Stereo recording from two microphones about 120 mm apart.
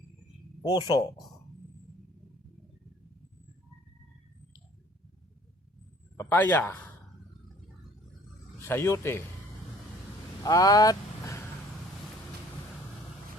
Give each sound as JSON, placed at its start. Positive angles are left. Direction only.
{"t": 0.6, "sound": "speech", "side_deg": 35}
{"t": 6.1, "sound": "a man's voice", "side_deg": 15}
{"t": 8.6, "sound": "a man's voice", "side_deg": 20}
{"t": 10.4, "sound": "speech", "side_deg": 30}